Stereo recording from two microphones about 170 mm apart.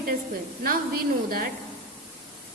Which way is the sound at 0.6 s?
60° right (ahead or behind).